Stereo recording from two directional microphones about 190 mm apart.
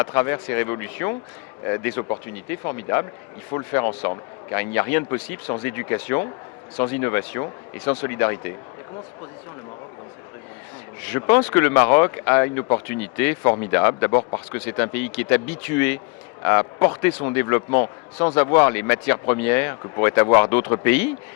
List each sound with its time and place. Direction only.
0.0 s speech: 15° left (ahead or behind)
11.0 s speech: 10° left (ahead or behind)